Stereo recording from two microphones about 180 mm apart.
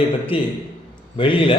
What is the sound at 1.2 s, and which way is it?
Speech, 30° left (ahead or behind).